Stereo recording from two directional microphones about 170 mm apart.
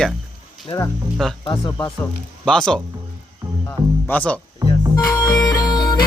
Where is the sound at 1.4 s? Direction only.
25° left (ahead or behind).